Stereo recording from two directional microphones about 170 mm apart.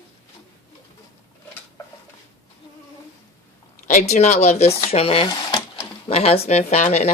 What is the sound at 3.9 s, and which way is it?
Speech, 40° left (ahead or behind).